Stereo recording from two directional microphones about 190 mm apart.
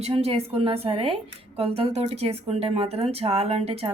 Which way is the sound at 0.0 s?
30° right (ahead or behind).